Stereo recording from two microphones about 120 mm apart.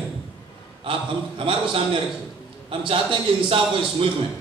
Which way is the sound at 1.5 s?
50° right (ahead or behind).